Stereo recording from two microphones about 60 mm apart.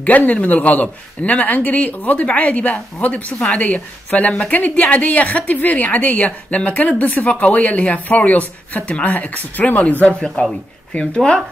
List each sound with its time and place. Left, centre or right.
0.0 s a woman's voice: left
11.1 s speech: centre